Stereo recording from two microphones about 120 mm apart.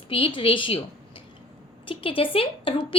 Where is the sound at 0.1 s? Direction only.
50° left (ahead or behind).